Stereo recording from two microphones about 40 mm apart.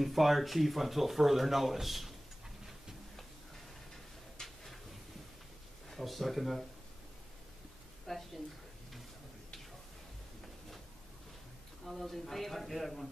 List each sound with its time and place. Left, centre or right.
0.0 s speech: centre
4.4 s a sound: centre
5.9 s speech: centre
8.1 s a woman's voice: centre
11.8 s speech: centre